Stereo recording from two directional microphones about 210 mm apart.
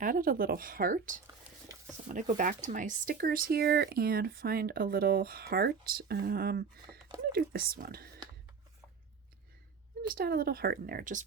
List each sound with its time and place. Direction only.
0.0 s speech: 40° right (ahead or behind)
10.1 s speech: 45° right (ahead or behind)